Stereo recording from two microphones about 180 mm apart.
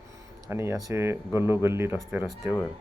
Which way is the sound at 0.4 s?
15° right (ahead or behind).